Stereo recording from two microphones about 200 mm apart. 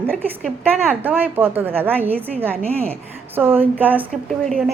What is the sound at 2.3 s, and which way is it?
Speech, 5° left (ahead or behind).